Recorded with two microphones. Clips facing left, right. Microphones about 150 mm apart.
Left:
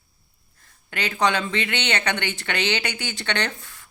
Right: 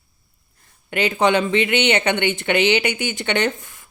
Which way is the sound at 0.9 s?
20° right (ahead or behind).